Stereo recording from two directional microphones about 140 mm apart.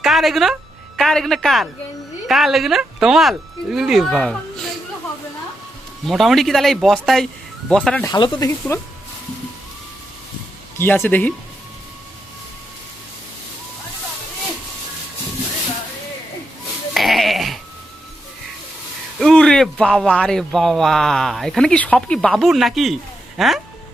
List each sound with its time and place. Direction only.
0.0 s speech: centre (ahead or behind)
6.1 s speech: centre (ahead or behind)
8.0 s speech: 30° left (ahead or behind)
8.4 s speech: 20° left (ahead or behind)
10.8 s speech: 15° left (ahead or behind)
16.9 s sheep: centre (ahead or behind)
19.2 s speech: 5° left (ahead or behind)